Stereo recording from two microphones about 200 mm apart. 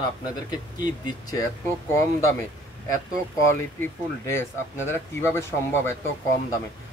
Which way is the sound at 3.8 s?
10° left (ahead or behind).